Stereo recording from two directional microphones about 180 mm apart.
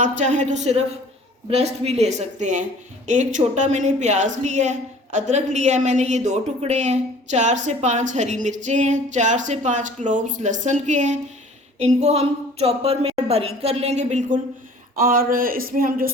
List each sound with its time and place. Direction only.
0.0 s a woman's voice: 40° right (ahead or behind)
14.9 s speech: 50° right (ahead or behind)